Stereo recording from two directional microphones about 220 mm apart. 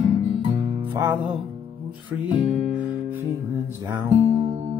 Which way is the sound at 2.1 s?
30° right (ahead or behind).